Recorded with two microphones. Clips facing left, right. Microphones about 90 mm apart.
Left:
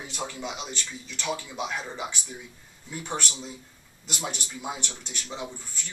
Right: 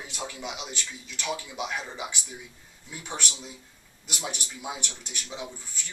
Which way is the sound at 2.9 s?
10° right (ahead or behind).